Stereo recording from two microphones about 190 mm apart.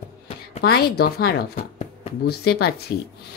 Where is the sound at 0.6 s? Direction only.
55° left (ahead or behind).